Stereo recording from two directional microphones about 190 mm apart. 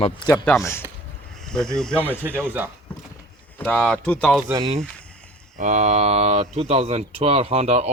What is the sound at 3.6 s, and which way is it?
Speech, 5° left (ahead or behind).